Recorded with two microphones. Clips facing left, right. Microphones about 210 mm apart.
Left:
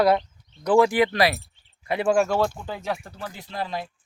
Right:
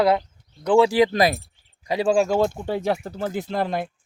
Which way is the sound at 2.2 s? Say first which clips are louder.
Right 3 dB; 15° right (ahead or behind).